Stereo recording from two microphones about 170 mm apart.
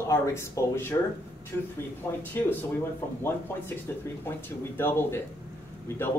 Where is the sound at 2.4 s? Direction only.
10° left (ahead or behind).